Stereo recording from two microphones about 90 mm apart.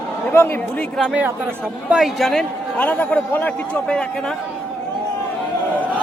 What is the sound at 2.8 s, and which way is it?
A man's voice, 15° left (ahead or behind).